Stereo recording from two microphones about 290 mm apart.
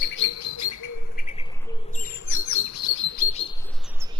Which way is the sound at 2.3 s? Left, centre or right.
Left.